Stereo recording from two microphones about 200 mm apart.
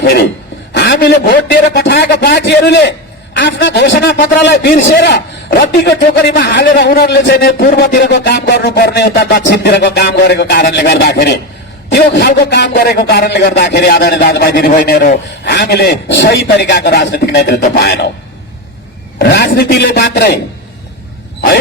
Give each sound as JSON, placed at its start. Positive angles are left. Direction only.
{"t": 0.0, "sound": "a man's voice", "side_deg": 50}
{"t": 19.2, "sound": "speech", "side_deg": 55}